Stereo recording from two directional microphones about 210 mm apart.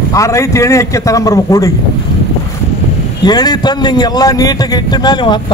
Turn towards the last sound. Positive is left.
turn(degrees=20)  # may be behind; listen again after turning